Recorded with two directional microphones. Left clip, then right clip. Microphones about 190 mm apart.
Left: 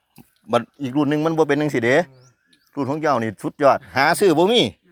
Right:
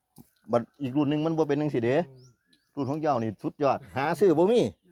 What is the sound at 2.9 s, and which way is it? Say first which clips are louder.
Speech: left 7 dB; 10° left (ahead or behind).